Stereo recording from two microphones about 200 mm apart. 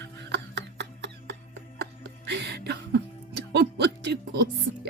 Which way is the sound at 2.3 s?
60° right (ahead or behind).